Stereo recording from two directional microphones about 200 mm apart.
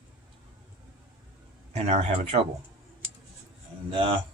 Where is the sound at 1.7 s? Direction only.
30° right (ahead or behind).